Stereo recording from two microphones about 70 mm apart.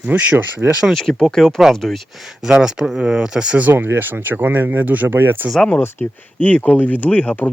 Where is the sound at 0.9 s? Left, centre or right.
Centre.